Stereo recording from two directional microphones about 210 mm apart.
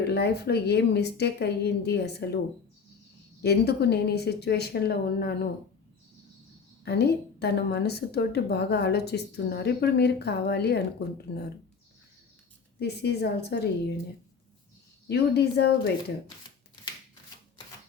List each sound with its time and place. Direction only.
0.0 s a woman's voice: 50° left (ahead or behind)
3.4 s a woman's voice: 50° left (ahead or behind)
6.8 s a woman's voice: 50° left (ahead or behind)
12.8 s a woman's voice: 50° left (ahead or behind)
15.0 s a woman's voice: 50° left (ahead or behind)